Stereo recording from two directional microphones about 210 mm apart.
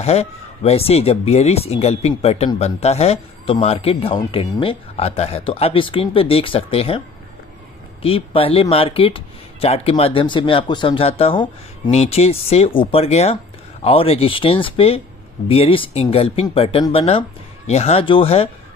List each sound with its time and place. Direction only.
0.0 s speech: 30° left (ahead or behind)
8.0 s speech: 25° left (ahead or behind)